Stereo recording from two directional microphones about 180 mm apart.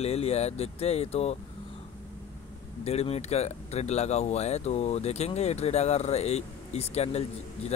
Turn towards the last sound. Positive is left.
turn(degrees=35)  # may be behind; listen again after turning